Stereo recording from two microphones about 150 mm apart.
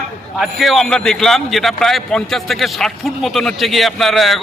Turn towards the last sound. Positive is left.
turn(degrees=0)  # may be behind; listen again after turning